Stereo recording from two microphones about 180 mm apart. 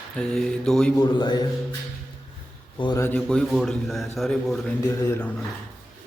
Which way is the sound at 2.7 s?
25° left (ahead or behind).